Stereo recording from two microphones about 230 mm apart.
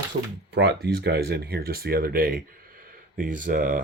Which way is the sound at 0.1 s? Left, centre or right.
Right.